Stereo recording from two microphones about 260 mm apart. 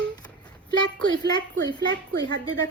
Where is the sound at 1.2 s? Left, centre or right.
Centre.